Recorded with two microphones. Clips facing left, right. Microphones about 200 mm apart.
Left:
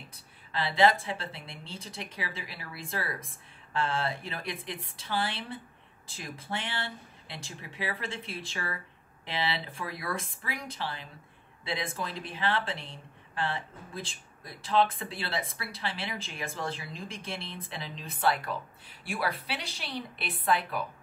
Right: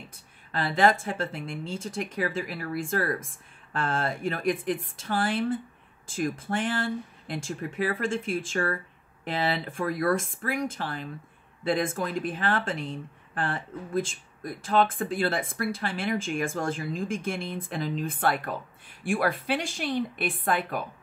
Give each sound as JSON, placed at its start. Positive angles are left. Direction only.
{"t": 0.1, "sound": "speech", "side_deg": -50}